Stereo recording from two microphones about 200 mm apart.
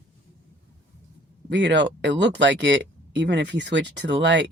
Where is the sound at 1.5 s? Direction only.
60° right (ahead or behind).